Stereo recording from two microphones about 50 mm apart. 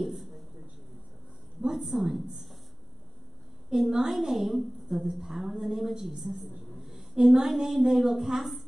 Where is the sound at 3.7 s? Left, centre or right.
Centre.